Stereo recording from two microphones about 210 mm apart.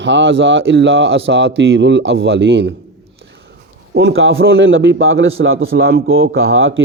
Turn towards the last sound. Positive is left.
turn(degrees=-65)  # may be behind; listen again after turning